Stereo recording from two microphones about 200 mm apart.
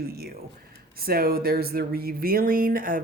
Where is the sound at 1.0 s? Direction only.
50° right (ahead or behind).